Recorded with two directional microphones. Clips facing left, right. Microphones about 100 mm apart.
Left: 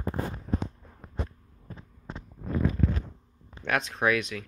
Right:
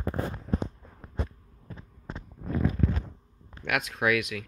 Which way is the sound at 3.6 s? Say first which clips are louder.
Left 1 dB; 30° left (ahead or behind).